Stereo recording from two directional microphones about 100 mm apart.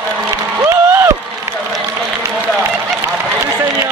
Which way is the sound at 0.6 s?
25° right (ahead or behind).